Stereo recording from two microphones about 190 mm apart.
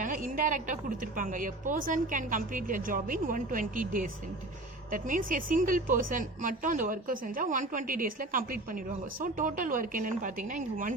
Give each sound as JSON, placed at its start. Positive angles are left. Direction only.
{"t": 0.0, "sound": "a woman's voice", "side_deg": -45}